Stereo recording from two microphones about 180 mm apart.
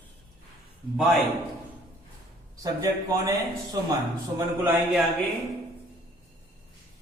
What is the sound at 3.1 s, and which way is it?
Speech, 20° right (ahead or behind).